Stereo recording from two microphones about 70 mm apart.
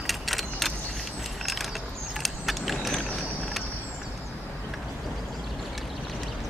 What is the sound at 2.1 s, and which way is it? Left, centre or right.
Vehicle, centre.